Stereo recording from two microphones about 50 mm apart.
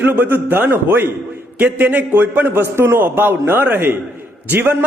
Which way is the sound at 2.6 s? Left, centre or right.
Right.